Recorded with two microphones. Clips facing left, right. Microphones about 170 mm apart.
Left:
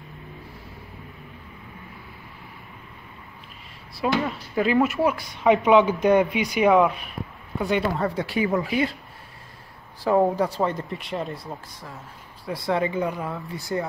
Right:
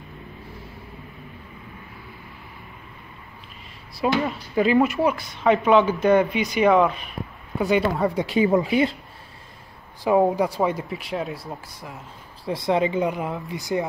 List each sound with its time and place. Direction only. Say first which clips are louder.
4.2 s speech: right 2 dB; 5° right (ahead or behind)
7.6 s speech: right 3 dB; 5° right (ahead or behind)
7.9 s speech: right 3 dB; 15° right (ahead or behind)
10.0 s speech: right 1 dB; 15° right (ahead or behind)
12.4 s speech: right 3 dB; 20° right (ahead or behind)